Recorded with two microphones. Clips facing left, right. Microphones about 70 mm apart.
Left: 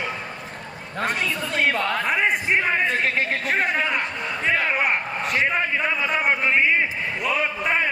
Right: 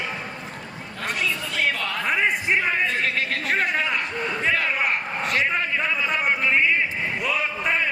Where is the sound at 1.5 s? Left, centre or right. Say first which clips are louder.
Left 3 dB; left.